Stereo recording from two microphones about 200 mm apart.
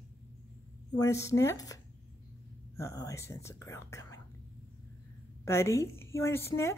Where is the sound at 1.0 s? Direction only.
15° left (ahead or behind).